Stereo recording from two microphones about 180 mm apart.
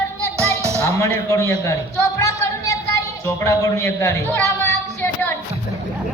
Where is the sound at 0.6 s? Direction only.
15° right (ahead or behind).